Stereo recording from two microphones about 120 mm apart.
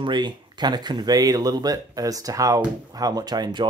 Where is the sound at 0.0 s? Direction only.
40° right (ahead or behind).